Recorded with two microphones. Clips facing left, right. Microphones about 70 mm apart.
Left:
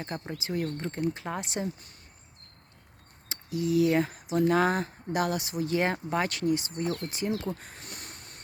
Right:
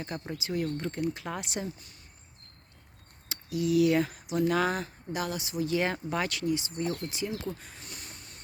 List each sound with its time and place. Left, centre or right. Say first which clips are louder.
0.0 s speech: left 1 dB; left
3.2 s speech: even; left